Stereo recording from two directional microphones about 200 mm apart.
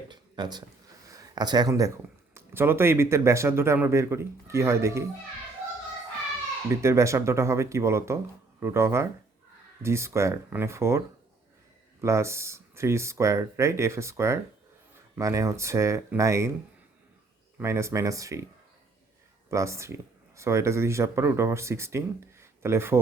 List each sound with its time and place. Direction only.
0.1 s a sound: 20° right (ahead or behind)
2.3 s speech: 10° right (ahead or behind)
6.7 s speech: 15° right (ahead or behind)
17.6 s speech: 15° right (ahead or behind)
19.5 s speech: 15° right (ahead or behind)